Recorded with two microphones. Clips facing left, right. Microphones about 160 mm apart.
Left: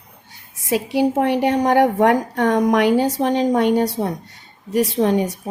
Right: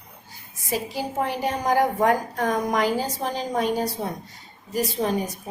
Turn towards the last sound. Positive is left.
turn(degrees=80)